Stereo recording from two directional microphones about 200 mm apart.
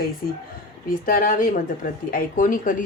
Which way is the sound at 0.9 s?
45° left (ahead or behind).